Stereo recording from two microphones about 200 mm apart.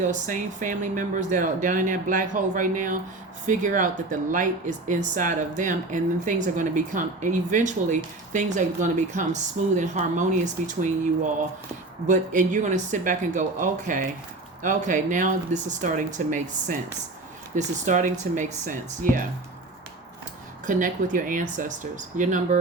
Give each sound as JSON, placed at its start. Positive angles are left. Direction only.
{"t": 0.0, "sound": "speech", "side_deg": -40}
{"t": 20.7, "sound": "speech", "side_deg": -40}